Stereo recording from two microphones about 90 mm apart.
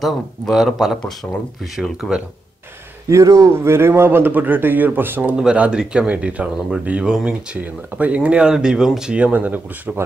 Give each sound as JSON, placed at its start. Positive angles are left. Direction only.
{"t": 0.0, "sound": "speech", "side_deg": 0}
{"t": 3.1, "sound": "a man's voice", "side_deg": -35}
{"t": 5.3, "sound": "speech", "side_deg": -10}